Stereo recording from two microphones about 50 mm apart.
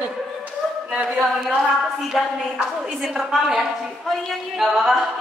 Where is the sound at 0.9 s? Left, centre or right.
Centre.